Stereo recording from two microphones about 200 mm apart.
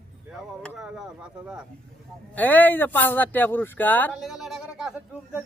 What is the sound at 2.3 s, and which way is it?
Speech, 10° left (ahead or behind).